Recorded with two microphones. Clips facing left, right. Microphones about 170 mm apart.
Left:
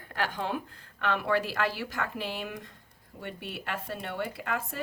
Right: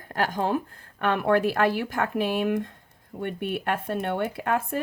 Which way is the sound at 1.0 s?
55° right (ahead or behind).